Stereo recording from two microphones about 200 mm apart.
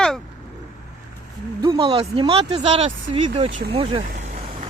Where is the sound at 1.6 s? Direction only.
25° right (ahead or behind).